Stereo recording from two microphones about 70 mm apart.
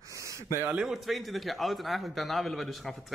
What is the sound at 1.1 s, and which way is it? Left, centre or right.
A man's voice, centre.